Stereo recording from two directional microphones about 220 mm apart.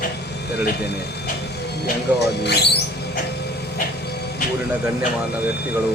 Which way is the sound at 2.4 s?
50° left (ahead or behind).